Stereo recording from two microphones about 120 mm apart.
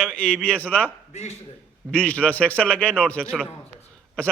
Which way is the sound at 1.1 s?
65° left (ahead or behind).